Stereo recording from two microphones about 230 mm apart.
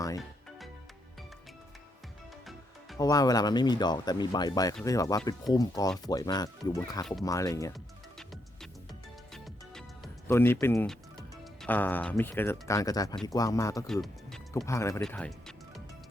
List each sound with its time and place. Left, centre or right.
3.0 s speech: centre
10.2 s speech: centre
13.8 s music: centre
14.5 s speech: centre